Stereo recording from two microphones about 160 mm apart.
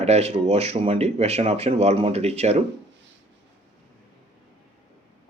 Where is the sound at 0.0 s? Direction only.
40° right (ahead or behind).